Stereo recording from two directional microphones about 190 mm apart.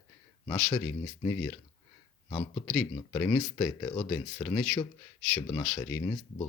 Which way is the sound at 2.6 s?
5° left (ahead or behind).